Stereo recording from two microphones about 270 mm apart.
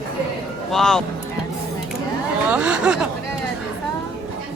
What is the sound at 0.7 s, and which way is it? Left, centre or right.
Speech, centre.